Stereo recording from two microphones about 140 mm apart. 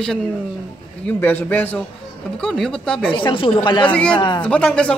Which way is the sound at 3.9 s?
10° left (ahead or behind).